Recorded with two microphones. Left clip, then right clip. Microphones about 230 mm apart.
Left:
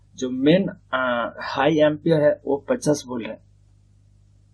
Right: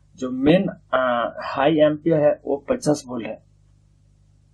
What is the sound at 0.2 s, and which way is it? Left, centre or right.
Speech, centre.